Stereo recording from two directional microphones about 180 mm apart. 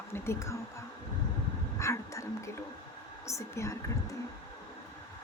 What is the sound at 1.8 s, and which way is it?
Speech, 15° left (ahead or behind).